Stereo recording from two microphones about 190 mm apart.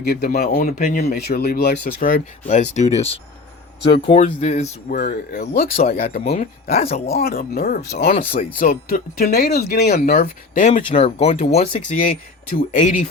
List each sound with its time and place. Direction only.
0.0 s speech: 55° left (ahead or behind); by 4.9 s 40° left (ahead or behind)
4.9 s speech: 50° left (ahead or behind)
6.2 s speech: 35° left (ahead or behind)
7.1 s speech: 50° left (ahead or behind)
8.2 s speech: 30° left (ahead or behind)
8.5 s speech: 45° left (ahead or behind)
9.8 s speech: 45° left (ahead or behind)
11.9 s speech: 50° left (ahead or behind)
12.5 s speech: 35° left (ahead or behind)